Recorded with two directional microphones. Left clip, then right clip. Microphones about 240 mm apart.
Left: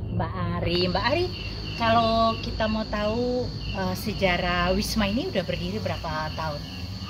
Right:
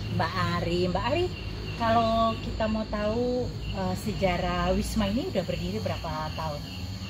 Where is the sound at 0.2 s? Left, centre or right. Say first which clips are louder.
Right 2 dB; centre.